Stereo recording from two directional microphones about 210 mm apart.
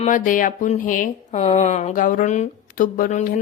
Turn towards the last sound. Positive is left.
turn(degrees=40)  # may be behind; listen again after turning